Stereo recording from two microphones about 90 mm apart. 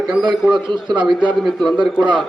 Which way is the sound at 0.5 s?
60° right (ahead or behind).